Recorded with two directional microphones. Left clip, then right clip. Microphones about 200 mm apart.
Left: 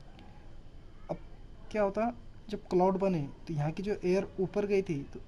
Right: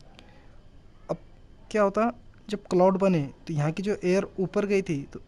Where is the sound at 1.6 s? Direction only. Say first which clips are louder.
Right 7 dB; 45° right (ahead or behind).